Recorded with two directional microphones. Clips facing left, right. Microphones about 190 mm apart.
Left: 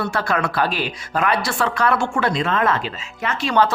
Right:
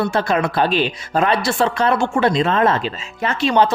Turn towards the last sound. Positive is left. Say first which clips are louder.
# right 4 dB
turn(degrees=-30)  # may be behind; listen again after turning